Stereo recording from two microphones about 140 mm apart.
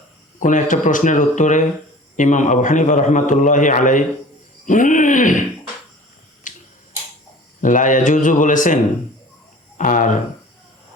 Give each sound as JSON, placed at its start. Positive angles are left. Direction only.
{"t": 0.3, "sound": "a man's voice", "side_deg": 65}
{"t": 6.5, "sound": "finger snapping", "side_deg": 65}
{"t": 7.6, "sound": "speech", "side_deg": 65}